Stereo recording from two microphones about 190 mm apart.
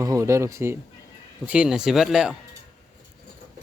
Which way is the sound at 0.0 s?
15° right (ahead or behind).